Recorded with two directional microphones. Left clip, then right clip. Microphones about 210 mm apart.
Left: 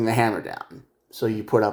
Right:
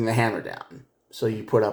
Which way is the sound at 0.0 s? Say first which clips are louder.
Left 2 dB; 35° left (ahead or behind).